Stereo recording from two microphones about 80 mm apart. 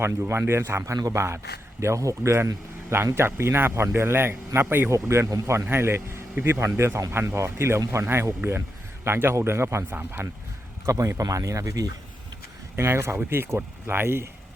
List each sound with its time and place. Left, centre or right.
0.0 s a man's voice: right
4.9 s a man's voice: right
10.8 s speech: right